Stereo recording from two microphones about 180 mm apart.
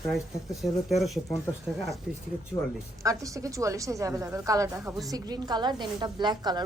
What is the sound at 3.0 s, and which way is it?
A woman's voice, 20° right (ahead or behind).